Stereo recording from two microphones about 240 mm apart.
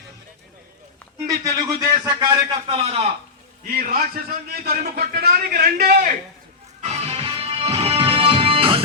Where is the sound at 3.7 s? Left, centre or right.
Right.